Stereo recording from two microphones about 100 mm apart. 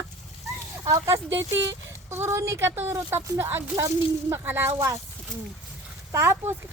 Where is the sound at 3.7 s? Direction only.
30° right (ahead or behind).